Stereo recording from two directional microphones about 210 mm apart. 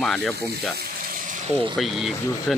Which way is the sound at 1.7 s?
Centre (ahead or behind).